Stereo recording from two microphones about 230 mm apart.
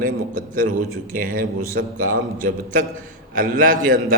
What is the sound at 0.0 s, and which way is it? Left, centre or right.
A man's voice, right.